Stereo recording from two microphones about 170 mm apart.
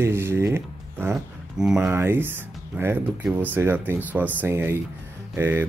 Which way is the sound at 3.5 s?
10° right (ahead or behind).